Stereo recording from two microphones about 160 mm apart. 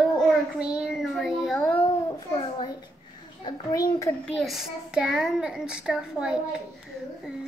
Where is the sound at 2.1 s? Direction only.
25° left (ahead or behind).